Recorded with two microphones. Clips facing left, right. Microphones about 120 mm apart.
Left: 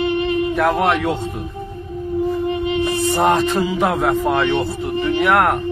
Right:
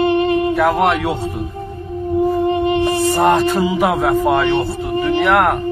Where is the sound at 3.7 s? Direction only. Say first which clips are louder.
Right 2 dB; 10° right (ahead or behind).